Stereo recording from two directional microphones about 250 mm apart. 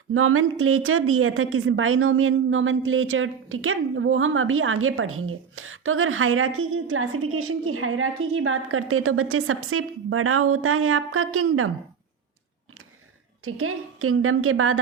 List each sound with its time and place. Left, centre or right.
0.1 s a woman's voice: right
13.4 s a woman's voice: right